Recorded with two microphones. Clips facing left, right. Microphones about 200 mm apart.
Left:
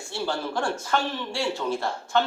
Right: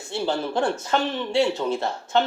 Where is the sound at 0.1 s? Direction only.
20° right (ahead or behind).